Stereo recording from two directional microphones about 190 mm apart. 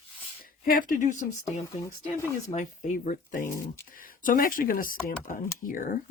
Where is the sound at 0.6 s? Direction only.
45° left (ahead or behind).